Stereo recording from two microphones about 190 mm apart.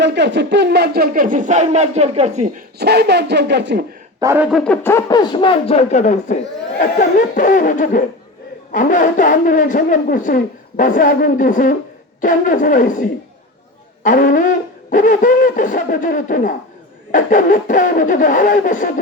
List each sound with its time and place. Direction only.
0.0 s speech: 65° right (ahead or behind); by 2.5 s 35° right (ahead or behind)
2.7 s speech: 60° right (ahead or behind)
4.2 s speech: 15° right (ahead or behind)
4.4 s speech: centre (ahead or behind); by 18.9 s 45° left (ahead or behind)